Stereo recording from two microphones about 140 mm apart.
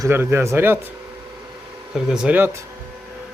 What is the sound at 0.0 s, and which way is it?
Speech, 15° right (ahead or behind).